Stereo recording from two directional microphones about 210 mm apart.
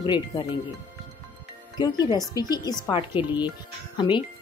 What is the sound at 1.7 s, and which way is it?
Speech, 20° left (ahead or behind).